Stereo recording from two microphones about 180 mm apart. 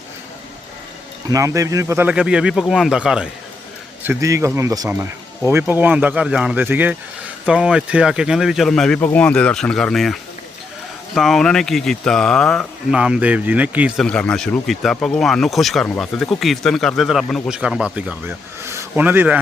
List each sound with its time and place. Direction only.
1.3 s speech: 20° right (ahead or behind)
4.0 s speech: 15° right (ahead or behind)